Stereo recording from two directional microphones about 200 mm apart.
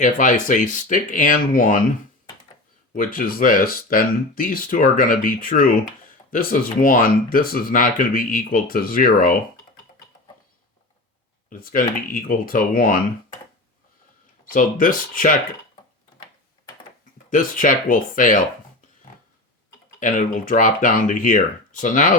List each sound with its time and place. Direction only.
0.0 s speech: 40° left (ahead or behind)
2.9 s speech: 45° left (ahead or behind)
11.4 s speech: 45° left (ahead or behind)
14.5 s speech: 40° left (ahead or behind)
17.2 s speech: 40° left (ahead or behind)
20.0 s speech: 40° left (ahead or behind)